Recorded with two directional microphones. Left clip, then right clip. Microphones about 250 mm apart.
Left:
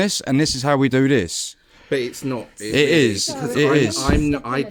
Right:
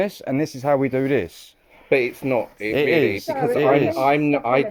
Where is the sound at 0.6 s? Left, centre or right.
Left.